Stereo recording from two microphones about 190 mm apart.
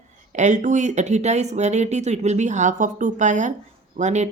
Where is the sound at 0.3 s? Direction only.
40° right (ahead or behind).